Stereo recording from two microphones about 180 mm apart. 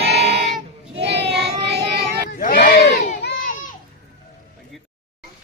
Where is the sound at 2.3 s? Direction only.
50° left (ahead or behind).